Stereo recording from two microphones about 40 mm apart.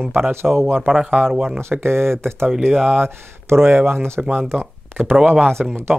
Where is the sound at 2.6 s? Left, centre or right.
Centre.